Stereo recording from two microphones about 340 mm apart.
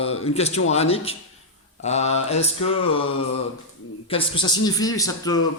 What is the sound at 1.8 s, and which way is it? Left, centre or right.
Mantra, centre.